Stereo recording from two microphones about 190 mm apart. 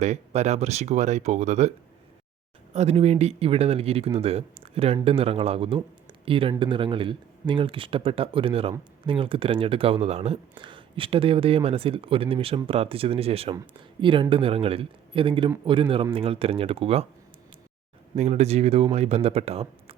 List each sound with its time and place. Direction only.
0.0 s speech: 35° right (ahead or behind)
2.7 s speech: 35° right (ahead or behind)
18.1 s speech: 35° right (ahead or behind)